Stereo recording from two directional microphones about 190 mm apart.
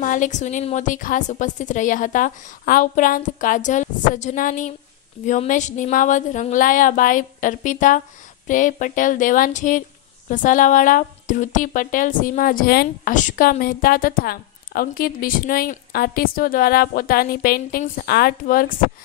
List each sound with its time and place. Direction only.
0.0 s speech: 45° left (ahead or behind)